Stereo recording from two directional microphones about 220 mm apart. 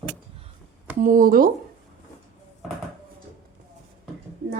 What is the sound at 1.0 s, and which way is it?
Speech, 40° right (ahead or behind).